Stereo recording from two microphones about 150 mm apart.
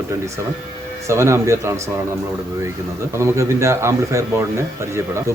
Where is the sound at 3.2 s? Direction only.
20° right (ahead or behind).